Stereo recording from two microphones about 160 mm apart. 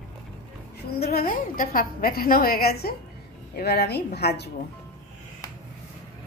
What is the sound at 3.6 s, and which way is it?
Speech, 90° left.